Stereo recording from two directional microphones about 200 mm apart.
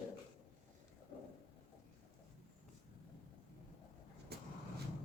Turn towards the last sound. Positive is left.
turn(degrees=-50)  # may be behind; listen again after turning